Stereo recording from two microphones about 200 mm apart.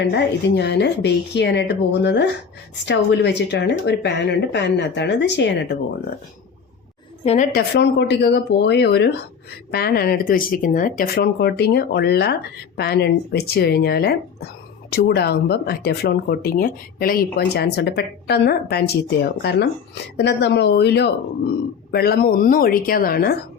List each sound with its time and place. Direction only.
0.0 s speech: 60° left (ahead or behind)
7.5 s speech: 55° left (ahead or behind)